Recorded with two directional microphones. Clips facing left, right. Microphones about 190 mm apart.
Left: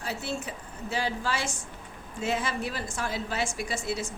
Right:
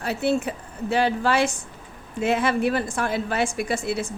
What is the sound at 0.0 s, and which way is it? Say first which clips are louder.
A woman's voice: right 10 dB; 60° right (ahead or behind).